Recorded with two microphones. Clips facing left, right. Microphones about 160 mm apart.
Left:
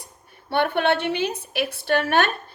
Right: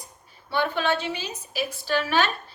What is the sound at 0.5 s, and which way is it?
A woman's voice, 60° left (ahead or behind).